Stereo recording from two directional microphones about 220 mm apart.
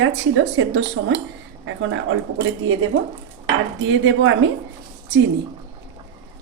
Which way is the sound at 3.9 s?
55° right (ahead or behind).